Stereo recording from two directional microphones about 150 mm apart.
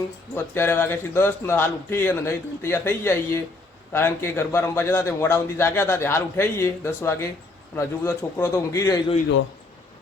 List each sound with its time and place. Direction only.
0.5 s a man's voice: 15° left (ahead or behind)